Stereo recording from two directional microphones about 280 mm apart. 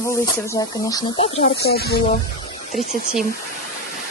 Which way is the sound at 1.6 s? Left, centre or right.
Left.